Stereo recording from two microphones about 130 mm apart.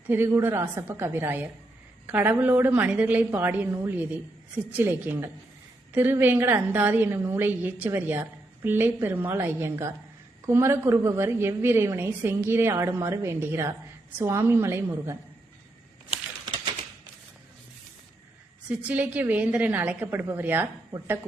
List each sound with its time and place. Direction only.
0.1 s a woman's voice: 20° right (ahead or behind)
18.7 s a woman's voice: 10° right (ahead or behind)